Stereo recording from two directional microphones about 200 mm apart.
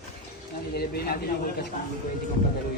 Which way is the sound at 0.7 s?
50° left (ahead or behind).